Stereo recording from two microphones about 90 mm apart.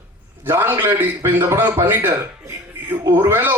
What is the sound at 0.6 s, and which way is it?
Speech, 25° right (ahead or behind).